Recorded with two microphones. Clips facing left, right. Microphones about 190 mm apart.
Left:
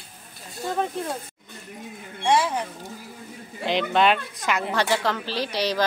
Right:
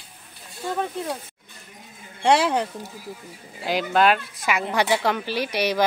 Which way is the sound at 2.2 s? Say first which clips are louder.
Right 3 dB; 70° right (ahead or behind).